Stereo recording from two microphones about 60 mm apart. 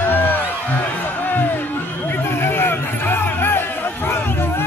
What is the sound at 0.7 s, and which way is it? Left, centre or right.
Music, left.